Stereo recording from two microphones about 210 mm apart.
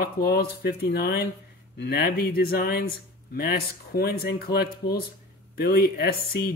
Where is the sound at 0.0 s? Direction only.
50° left (ahead or behind).